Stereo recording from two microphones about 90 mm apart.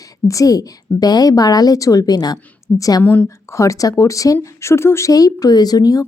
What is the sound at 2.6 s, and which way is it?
A woman's voice, 35° left (ahead or behind).